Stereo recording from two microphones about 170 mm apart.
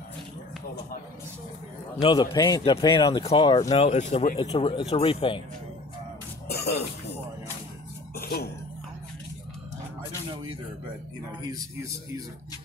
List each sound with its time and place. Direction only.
2.0 s a man's voice: 30° left (ahead or behind); by 4.4 s 45° left (ahead or behind)
4.5 s speech: 35° left (ahead or behind)
6.4 s cough: 65° left (ahead or behind)
8.2 s throat clearing: 65° left (ahead or behind)
11.4 s a man's voice: 20° right (ahead or behind)